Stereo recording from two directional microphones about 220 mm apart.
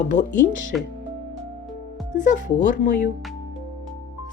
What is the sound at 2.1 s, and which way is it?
Speech, 35° left (ahead or behind).